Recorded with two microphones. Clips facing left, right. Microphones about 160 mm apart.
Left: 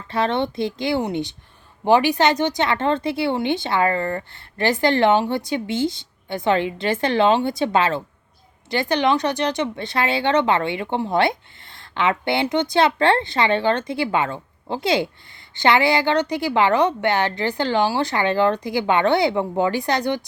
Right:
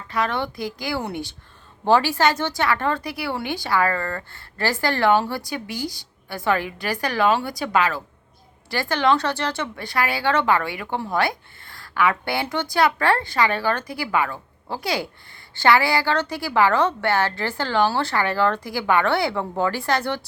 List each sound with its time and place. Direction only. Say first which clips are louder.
0.1 s speech: left 3 dB; 25° left (ahead or behind)